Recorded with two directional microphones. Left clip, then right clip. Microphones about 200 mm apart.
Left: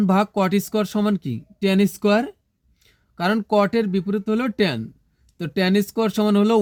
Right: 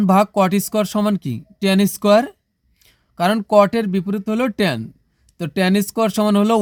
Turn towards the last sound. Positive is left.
turn(degrees=-30)  # may be behind; listen again after turning